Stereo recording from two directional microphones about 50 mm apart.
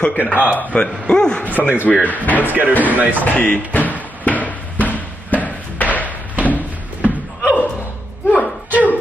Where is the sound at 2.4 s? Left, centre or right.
Right.